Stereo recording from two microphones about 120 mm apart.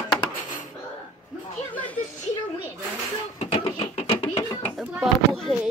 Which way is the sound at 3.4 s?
55° left (ahead or behind).